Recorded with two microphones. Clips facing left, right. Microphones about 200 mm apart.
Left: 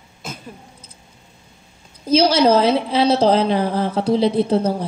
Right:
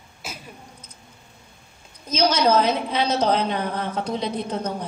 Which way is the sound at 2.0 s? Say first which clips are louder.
Left 6 dB; 30° left (ahead or behind).